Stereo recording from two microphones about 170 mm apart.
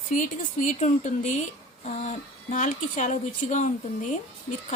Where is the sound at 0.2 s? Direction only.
45° left (ahead or behind).